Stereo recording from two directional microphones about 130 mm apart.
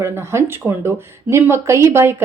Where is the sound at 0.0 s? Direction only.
20° right (ahead or behind).